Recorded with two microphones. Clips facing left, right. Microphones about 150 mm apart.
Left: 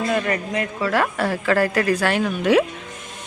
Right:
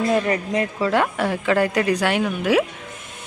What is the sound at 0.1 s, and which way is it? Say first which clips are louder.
A man's voice: right 2 dB; 25° right (ahead or behind).